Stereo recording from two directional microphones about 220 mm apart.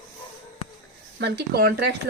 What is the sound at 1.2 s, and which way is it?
Speech, 45° right (ahead or behind).